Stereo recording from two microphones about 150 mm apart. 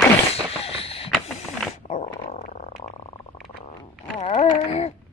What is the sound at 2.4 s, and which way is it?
Frog, 55° left (ahead or behind).